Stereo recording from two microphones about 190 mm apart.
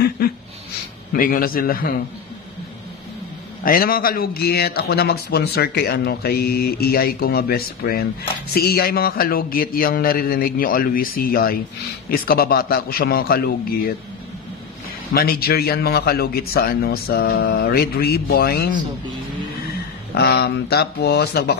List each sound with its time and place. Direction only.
0.2 s a man's voice: 55° left (ahead or behind)
3.6 s a man's voice: 50° left (ahead or behind)
15.1 s a man's voice: 55° left (ahead or behind)
20.2 s a man's voice: 55° left (ahead or behind)